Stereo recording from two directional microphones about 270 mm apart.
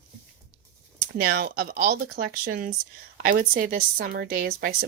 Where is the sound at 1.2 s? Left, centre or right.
Right.